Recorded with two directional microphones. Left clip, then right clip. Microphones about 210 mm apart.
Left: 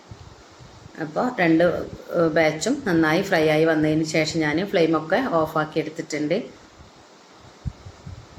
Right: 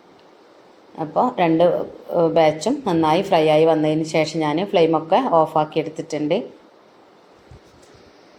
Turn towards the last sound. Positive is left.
turn(degrees=-15)  # may be behind; listen again after turning